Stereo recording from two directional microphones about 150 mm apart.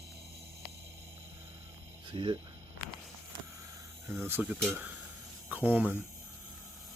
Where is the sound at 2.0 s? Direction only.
35° right (ahead or behind).